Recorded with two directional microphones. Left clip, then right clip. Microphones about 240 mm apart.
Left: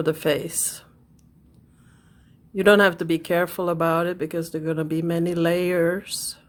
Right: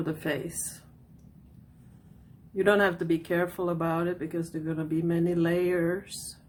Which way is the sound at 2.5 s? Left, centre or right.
Left.